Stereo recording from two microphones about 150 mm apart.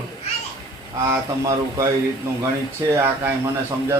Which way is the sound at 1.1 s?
20° right (ahead or behind).